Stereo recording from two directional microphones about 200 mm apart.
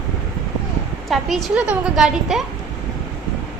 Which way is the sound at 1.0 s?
Centre (ahead or behind).